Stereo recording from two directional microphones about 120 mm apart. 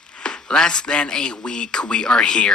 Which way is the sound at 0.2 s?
5° left (ahead or behind).